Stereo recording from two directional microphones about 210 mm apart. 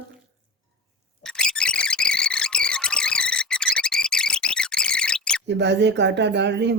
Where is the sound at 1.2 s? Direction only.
5° left (ahead or behind).